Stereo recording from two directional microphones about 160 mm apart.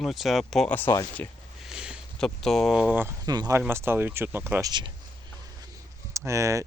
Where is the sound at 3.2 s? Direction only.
25° right (ahead or behind).